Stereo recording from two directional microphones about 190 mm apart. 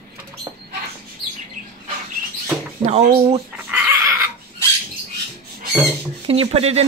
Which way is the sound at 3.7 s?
10° right (ahead or behind).